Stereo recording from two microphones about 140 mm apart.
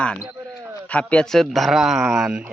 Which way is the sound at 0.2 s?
15° right (ahead or behind).